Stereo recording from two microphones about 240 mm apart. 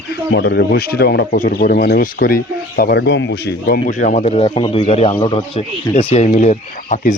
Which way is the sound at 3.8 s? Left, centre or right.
Left.